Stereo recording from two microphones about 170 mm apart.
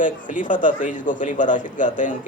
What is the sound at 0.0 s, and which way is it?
A man's voice, 50° left (ahead or behind).